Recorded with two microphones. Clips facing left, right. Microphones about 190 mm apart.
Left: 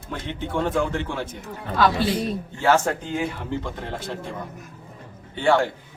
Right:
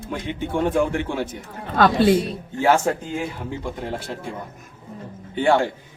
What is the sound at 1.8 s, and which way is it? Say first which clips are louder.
Speech: right 5 dB; 50° right (ahead or behind).